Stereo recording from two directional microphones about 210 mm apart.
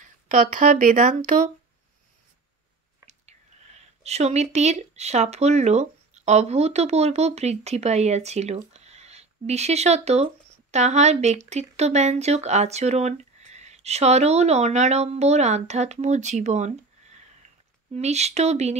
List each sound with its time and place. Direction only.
0.0 s speech: 35° right (ahead or behind)
3.1 s speech: 30° right (ahead or behind)